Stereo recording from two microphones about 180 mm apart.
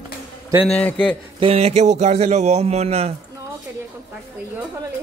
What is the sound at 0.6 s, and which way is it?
Speech, 5° left (ahead or behind).